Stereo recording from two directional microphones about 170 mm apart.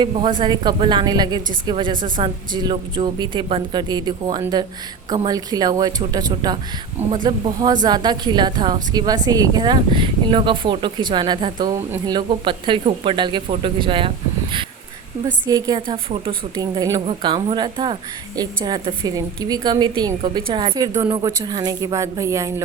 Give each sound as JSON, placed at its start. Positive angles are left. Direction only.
{"t": 0.0, "sound": "a woman's voice", "side_deg": -25}
{"t": 15.4, "sound": "a woman's voice", "side_deg": -20}